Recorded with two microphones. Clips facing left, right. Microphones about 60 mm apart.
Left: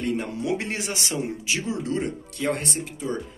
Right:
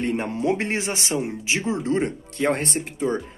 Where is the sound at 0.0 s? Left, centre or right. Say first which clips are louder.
Right 3 dB; right.